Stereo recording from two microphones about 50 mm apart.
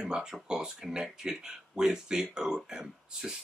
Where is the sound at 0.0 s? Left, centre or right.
Centre.